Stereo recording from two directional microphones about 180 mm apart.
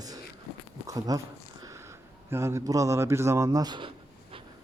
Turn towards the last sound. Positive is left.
turn(degrees=-25)  # may be behind; listen again after turning